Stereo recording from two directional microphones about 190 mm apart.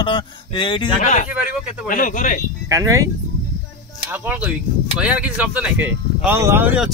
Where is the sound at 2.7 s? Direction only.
15° right (ahead or behind).